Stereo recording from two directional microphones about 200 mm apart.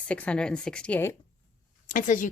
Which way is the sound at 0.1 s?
5° left (ahead or behind).